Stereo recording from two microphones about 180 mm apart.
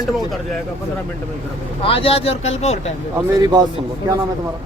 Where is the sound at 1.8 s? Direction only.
30° left (ahead or behind).